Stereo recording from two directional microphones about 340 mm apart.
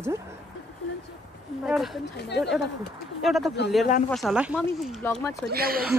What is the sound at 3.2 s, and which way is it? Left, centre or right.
Speech, centre.